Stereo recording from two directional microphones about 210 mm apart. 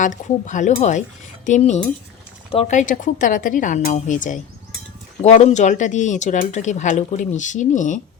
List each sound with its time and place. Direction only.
0.0 s speech: 35° left (ahead or behind)